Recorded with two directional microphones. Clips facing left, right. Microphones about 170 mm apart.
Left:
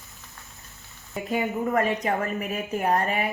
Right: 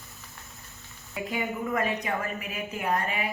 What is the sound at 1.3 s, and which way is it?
A woman's voice, 40° left (ahead or behind).